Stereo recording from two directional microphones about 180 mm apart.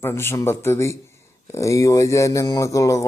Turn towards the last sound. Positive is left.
turn(degrees=15)  # may be behind; listen again after turning